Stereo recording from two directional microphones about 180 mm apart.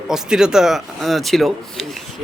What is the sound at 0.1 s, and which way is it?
Speech, 5° right (ahead or behind).